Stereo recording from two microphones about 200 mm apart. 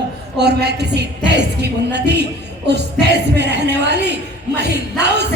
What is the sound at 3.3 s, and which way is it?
Speech, 55° right (ahead or behind).